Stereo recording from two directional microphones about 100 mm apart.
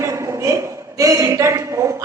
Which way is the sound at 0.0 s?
30° right (ahead or behind).